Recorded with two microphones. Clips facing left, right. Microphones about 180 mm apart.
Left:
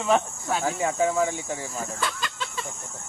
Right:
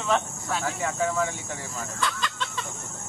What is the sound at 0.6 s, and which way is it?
Speech, 20° left (ahead or behind).